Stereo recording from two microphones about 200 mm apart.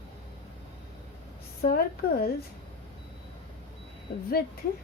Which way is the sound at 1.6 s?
50° left (ahead or behind).